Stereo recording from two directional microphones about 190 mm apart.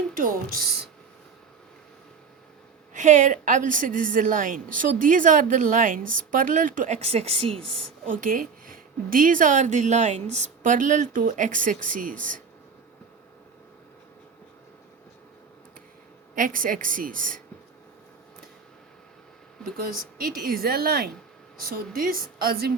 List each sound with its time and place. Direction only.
0.1 s a woman's voice: 45° right (ahead or behind)
2.9 s a woman's voice: 40° right (ahead or behind)
8.1 s a woman's voice: 45° right (ahead or behind)
16.3 s a woman's voice: 45° right (ahead or behind)
19.7 s a woman's voice: 50° right (ahead or behind)